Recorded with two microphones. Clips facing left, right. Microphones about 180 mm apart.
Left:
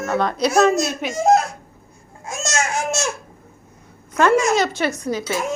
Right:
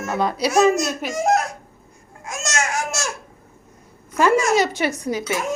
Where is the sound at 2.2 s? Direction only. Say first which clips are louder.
Left 1 dB; 30° left (ahead or behind).